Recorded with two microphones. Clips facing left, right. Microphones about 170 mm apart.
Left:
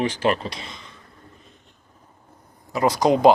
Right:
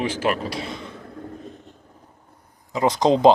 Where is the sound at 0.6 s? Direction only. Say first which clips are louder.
Right 9 dB; 55° right (ahead or behind).